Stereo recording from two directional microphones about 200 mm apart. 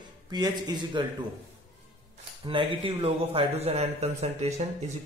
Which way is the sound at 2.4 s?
25° right (ahead or behind).